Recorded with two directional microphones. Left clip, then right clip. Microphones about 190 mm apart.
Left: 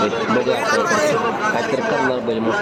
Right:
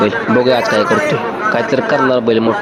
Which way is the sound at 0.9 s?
20° right (ahead or behind).